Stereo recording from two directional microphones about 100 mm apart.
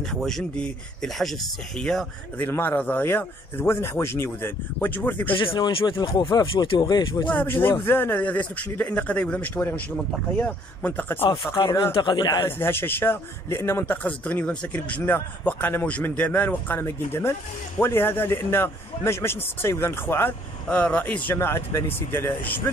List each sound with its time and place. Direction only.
0.0 s speech: 5° left (ahead or behind)
2.4 s speech: 20° left (ahead or behind)
5.4 s speech: 60° left (ahead or behind); by 7.2 s 40° left (ahead or behind)
7.2 s speech: 20° left (ahead or behind)
11.6 s speech: 45° left (ahead or behind)
12.4 s speech: 25° left (ahead or behind)
14.0 s speech: 15° left (ahead or behind)
20.6 s speech: 10° left (ahead or behind)